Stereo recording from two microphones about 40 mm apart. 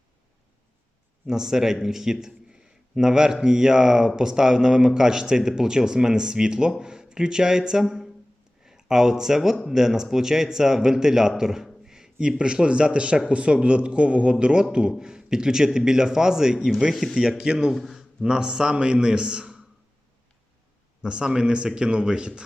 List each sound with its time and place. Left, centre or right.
1.3 s a man's voice: centre
11.9 s a sound: centre
12.6 s a man's voice: right
17.7 s a man's voice: centre
17.9 s a man's voice: centre
21.0 s a man's voice: right